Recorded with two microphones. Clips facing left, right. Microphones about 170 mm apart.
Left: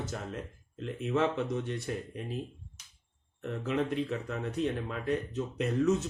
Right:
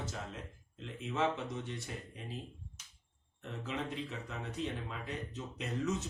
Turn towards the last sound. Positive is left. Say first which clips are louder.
# left 9 dB
turn(degrees=55)  # may be behind; listen again after turning